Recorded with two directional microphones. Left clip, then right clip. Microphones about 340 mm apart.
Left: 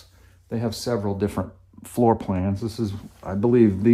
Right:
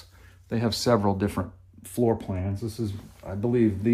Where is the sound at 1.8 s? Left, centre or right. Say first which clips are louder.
Left 5 dB; left.